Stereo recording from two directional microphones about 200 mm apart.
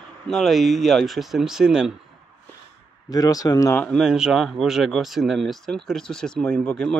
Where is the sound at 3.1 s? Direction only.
20° left (ahead or behind).